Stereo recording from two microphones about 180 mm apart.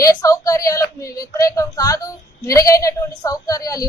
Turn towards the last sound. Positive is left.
turn(degrees=20)  # may be behind; listen again after turning